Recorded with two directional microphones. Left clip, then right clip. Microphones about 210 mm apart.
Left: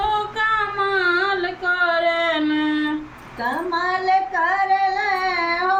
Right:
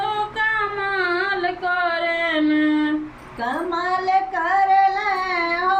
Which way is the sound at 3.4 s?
15° right (ahead or behind).